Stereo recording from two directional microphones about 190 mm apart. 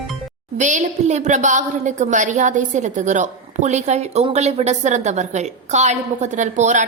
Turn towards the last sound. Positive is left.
turn(degrees=-40)  # may be behind; listen again after turning